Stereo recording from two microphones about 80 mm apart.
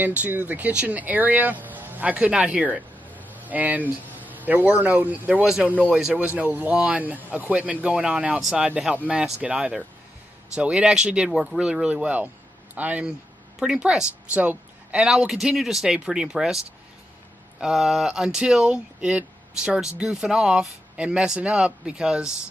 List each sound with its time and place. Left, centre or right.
0.0 s speech: right
5.4 s a woman's voice: centre
15.0 s speech: centre
17.6 s speech: centre